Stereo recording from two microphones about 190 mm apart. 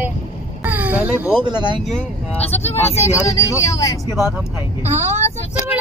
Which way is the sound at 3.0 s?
15° left (ahead or behind).